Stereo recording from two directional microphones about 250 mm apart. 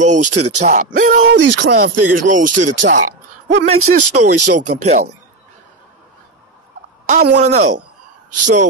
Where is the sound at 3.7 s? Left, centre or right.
Right.